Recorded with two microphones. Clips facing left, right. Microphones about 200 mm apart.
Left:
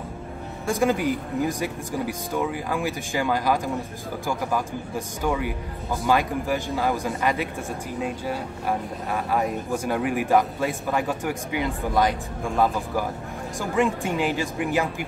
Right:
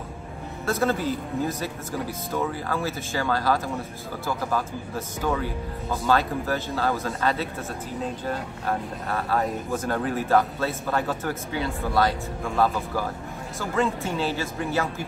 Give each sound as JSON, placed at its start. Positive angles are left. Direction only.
{"t": 0.7, "sound": "speech", "side_deg": 15}